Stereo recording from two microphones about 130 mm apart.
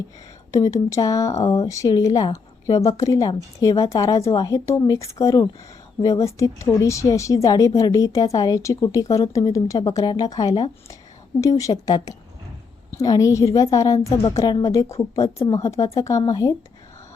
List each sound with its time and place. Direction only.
0.5 s a woman's voice: 25° left (ahead or behind)